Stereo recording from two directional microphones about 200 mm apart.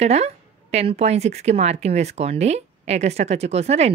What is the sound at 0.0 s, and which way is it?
A woman's voice, 35° right (ahead or behind).